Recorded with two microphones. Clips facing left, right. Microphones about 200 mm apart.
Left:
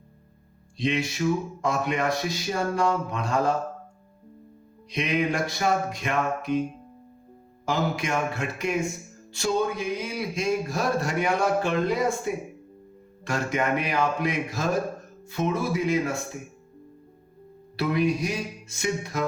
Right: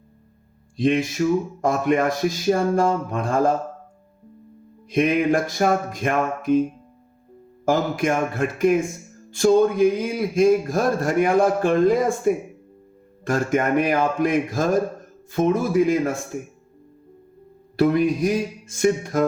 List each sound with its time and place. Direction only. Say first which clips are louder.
0.8 s speech: right 6 dB; 50° right (ahead or behind)
4.9 s speech: right 7 dB; 50° right (ahead or behind)
7.6 s speech: right 6 dB; 50° right (ahead or behind)
17.7 s speech: right 6 dB; 50° right (ahead or behind)